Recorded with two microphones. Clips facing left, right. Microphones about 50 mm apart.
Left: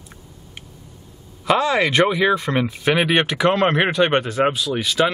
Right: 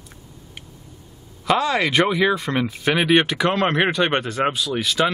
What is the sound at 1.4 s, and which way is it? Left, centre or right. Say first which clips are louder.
Speech: left 2 dB; centre.